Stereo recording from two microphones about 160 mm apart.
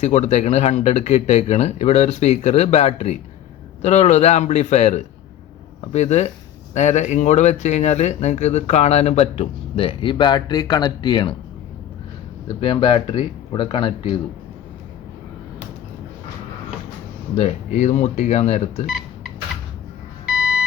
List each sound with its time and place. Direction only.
0.0 s speech: 45° left (ahead or behind); by 11.3 s 30° left (ahead or behind)
12.5 s speech: 35° left (ahead or behind)
17.7 s speech: 50° left (ahead or behind)
18.9 s a sound: 5° right (ahead or behind)
20.2 s beep: 5° right (ahead or behind)